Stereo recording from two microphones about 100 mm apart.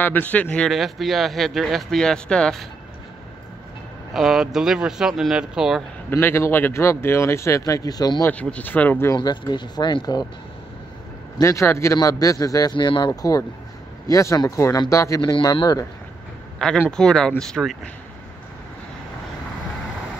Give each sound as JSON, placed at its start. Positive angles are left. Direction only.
{"t": 0.0, "sound": "speech", "side_deg": 15}
{"t": 0.7, "sound": "speech", "side_deg": 0}
{"t": 4.1, "sound": "speech", "side_deg": -5}
{"t": 6.0, "sound": "speech", "side_deg": 25}
{"t": 8.3, "sound": "speech", "side_deg": 15}
{"t": 9.1, "sound": "speech", "side_deg": 45}
{"t": 11.4, "sound": "speech", "side_deg": 30}
{"t": 12.7, "sound": "speech", "side_deg": 55}
{"t": 13.1, "sound": "speech", "side_deg": 35}
{"t": 16.5, "sound": "a man's voice", "side_deg": 5}